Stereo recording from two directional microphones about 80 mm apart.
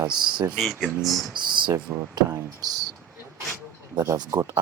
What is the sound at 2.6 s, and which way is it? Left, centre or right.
Speech, right.